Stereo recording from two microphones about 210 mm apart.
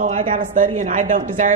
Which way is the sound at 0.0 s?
40° right (ahead or behind).